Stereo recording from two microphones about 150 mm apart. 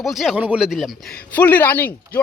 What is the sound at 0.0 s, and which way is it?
Speech, centre (ahead or behind).